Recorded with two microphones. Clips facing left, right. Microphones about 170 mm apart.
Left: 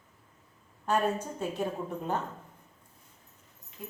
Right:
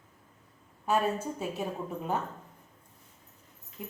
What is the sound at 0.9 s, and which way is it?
Speech, 5° right (ahead or behind).